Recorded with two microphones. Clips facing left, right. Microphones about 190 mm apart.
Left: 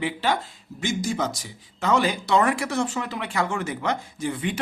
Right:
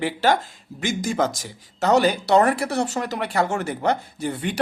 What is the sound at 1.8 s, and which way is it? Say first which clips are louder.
Speech: right 4 dB; 40° right (ahead or behind).